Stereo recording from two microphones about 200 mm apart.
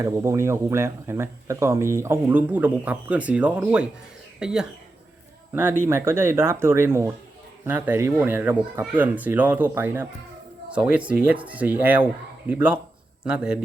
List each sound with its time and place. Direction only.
0.0 s speech: 15° right (ahead or behind)
5.9 s speech: 10° right (ahead or behind)